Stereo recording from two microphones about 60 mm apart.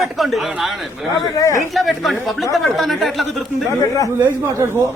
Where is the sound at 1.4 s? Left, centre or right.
Left.